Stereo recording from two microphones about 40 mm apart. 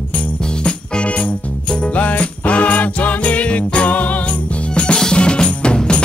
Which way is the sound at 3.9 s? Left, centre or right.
Left.